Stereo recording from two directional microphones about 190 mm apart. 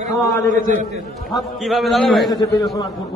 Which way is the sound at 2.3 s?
20° left (ahead or behind).